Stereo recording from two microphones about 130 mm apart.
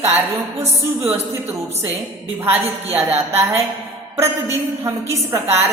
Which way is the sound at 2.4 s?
20° right (ahead or behind).